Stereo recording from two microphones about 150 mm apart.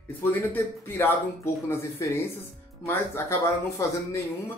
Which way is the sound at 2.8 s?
15° left (ahead or behind).